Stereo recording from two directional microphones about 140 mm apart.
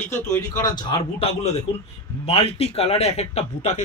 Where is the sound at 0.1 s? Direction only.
25° left (ahead or behind).